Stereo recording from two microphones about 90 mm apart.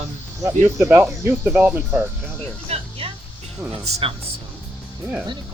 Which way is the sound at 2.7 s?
90° right.